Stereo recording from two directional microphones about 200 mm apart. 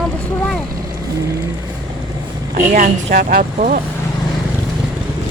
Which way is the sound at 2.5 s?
40° right (ahead or behind).